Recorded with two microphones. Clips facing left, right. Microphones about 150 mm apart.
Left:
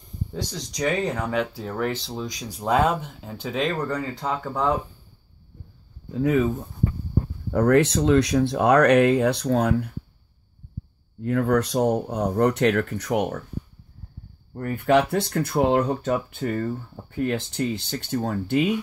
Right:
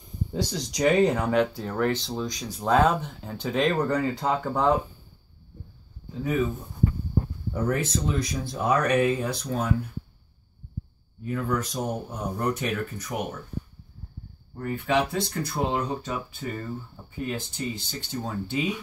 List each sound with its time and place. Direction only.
0.3 s speech: 5° right (ahead or behind)
7.5 s speech: 75° left (ahead or behind)
11.1 s speech: 70° left (ahead or behind)
14.5 s speech: 60° left (ahead or behind)